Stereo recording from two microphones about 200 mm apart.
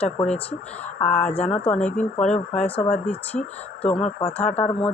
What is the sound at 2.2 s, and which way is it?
Speech, 5° left (ahead or behind).